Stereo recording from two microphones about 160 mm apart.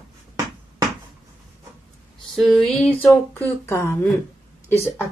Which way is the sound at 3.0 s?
10° left (ahead or behind).